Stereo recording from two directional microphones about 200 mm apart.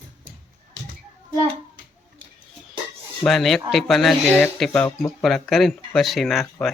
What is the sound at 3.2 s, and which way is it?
Speech, centre (ahead or behind).